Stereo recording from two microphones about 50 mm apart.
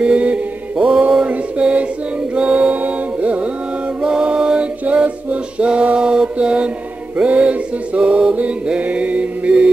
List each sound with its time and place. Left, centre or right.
0.0 s mantra: right
2.3 s carnatic music: right
4.0 s music: right
6.3 s mantra: right
7.2 s music: right